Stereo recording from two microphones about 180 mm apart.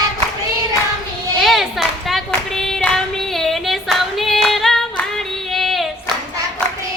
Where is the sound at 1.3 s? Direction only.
Centre (ahead or behind).